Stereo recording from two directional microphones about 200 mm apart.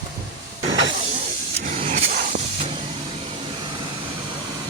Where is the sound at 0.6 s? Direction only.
20° right (ahead or behind).